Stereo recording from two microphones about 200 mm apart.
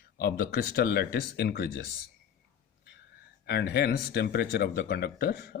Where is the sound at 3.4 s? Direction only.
55° left (ahead or behind).